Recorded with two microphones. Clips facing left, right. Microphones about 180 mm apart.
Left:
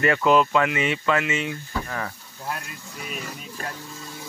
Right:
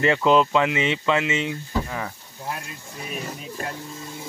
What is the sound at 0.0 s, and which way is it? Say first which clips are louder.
Speech: right 1 dB; 25° right (ahead or behind).